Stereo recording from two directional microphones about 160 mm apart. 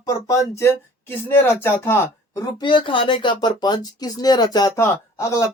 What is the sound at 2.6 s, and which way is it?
Speech, 30° left (ahead or behind).